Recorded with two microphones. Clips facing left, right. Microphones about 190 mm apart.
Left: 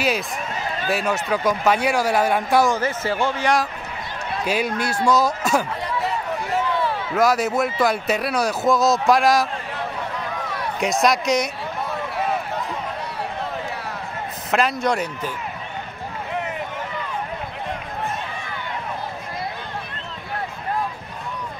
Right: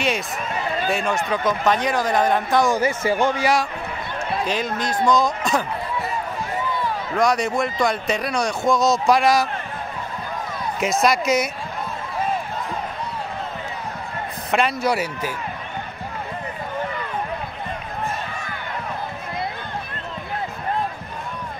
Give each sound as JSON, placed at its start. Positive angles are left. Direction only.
{"t": 0.8, "sound": "speech", "side_deg": 5}
{"t": 2.7, "sound": "speech", "side_deg": -15}
{"t": 4.5, "sound": "speech", "side_deg": 10}
{"t": 5.9, "sound": "a sound", "side_deg": 80}
{"t": 7.2, "sound": "speech", "side_deg": 5}
{"t": 10.8, "sound": "speech", "side_deg": 0}
{"t": 14.5, "sound": "speech", "side_deg": 0}